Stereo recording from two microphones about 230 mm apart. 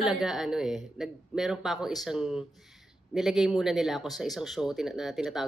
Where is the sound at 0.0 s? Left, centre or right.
Centre.